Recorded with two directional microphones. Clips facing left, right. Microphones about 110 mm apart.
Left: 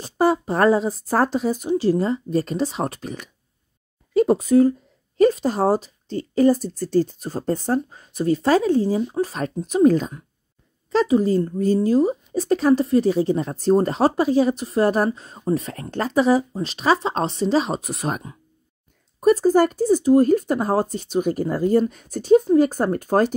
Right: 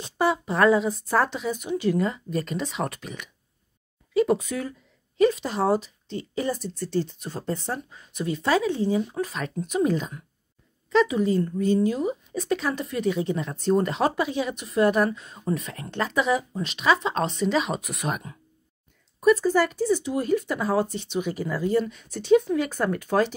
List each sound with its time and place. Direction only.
0.0 s speech: 40° left (ahead or behind)